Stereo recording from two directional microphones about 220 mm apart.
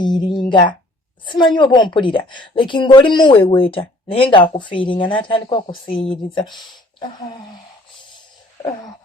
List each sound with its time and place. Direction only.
0.0 s a woman's voice: 20° left (ahead or behind)